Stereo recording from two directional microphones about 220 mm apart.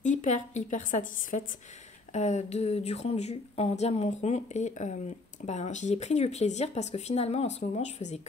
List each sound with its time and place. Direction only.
0.0 s a woman's voice: 35° left (ahead or behind)